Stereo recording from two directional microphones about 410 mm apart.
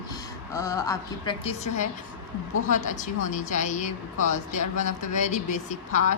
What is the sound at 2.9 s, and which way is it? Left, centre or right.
Speech, centre.